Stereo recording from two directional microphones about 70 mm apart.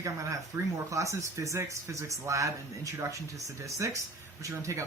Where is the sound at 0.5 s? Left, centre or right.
Right.